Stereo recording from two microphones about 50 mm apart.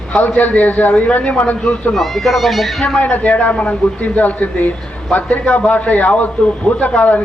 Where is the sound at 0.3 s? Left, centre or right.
Left.